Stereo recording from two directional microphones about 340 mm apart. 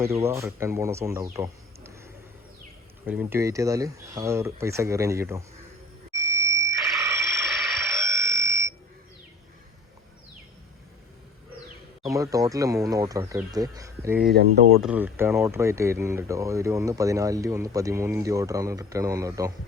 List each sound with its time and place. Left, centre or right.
0.0 s speech: centre
3.1 s speech: centre
7.0 s fire alarm: centre
12.0 s speech: centre
14.3 s speech: right
14.8 s speech: centre